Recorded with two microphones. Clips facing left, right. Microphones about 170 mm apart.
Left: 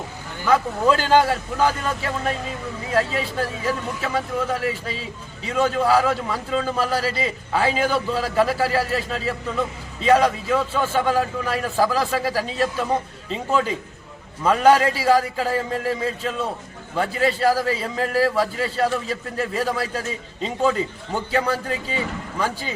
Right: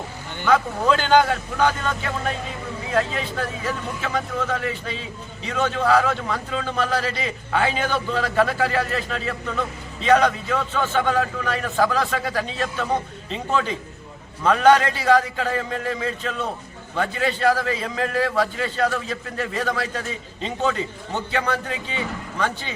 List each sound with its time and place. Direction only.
0.4 s a man's voice: 5° left (ahead or behind)